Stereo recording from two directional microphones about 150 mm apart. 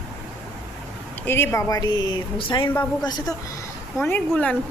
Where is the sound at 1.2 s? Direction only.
15° left (ahead or behind); by 2.7 s 35° left (ahead or behind).